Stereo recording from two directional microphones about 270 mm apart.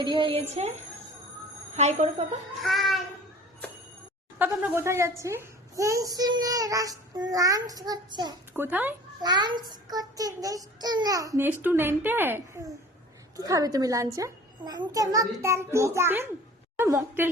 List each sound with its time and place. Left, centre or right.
0.0 s a woman's voice: centre
1.7 s a woman's voice: right
2.6 s child singing: centre
4.4 s a child's voice: centre